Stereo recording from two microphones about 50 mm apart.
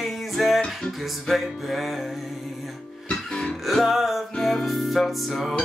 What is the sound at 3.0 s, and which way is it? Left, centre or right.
Music, centre.